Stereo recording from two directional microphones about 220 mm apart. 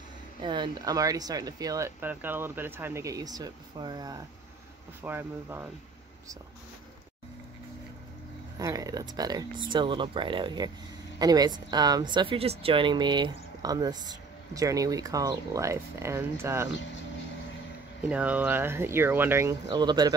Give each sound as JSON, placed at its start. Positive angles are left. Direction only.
{"t": 0.4, "sound": "speech", "side_deg": -20}
{"t": 8.5, "sound": "speech", "side_deg": -15}
{"t": 18.0, "sound": "speech", "side_deg": -5}